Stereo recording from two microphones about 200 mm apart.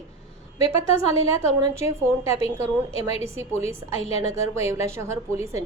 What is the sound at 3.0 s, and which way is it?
Speech, 30° left (ahead or behind).